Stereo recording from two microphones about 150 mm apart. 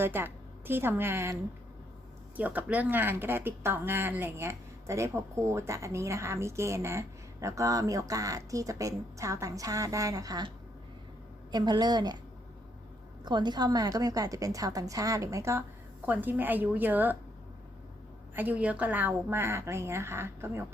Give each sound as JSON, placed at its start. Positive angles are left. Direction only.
{"t": 0.0, "sound": "a woman's voice", "side_deg": -15}
{"t": 11.5, "sound": "speech", "side_deg": -30}
{"t": 13.2, "sound": "a woman's voice", "side_deg": -30}
{"t": 18.3, "sound": "a woman's voice", "side_deg": -10}